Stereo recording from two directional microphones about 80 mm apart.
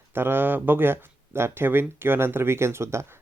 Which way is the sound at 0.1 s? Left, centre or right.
Right.